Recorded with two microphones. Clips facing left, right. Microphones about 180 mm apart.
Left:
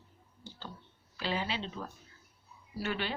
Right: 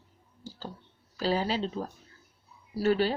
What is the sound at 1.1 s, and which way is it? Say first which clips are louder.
Speech: right 7 dB; 40° right (ahead or behind).